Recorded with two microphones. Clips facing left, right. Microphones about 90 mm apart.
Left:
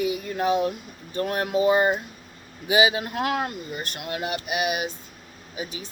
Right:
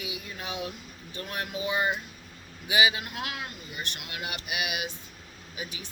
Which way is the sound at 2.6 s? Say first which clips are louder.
Left 5 dB; 30° left (ahead or behind).